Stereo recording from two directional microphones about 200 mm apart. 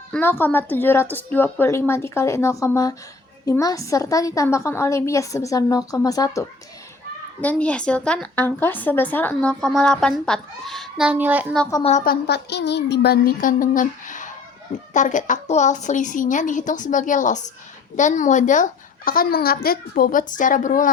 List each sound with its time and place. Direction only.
0.1 s a woman's voice: 10° left (ahead or behind)
7.4 s a woman's voice: 5° left (ahead or behind)
11.7 s a woman's voice: 30° left (ahead or behind)
12.0 s a woman's voice: 55° left (ahead or behind)